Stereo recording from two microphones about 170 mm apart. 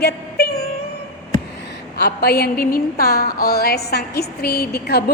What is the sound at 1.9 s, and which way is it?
A woman's voice, 70° left (ahead or behind).